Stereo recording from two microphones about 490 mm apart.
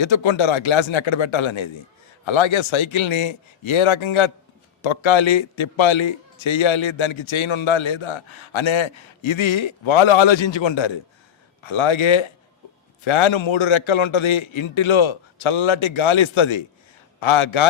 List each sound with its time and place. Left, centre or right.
0.0 s a man's voice: left